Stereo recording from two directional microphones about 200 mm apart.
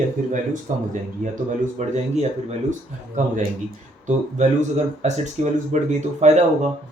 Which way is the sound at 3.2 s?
40° right (ahead or behind).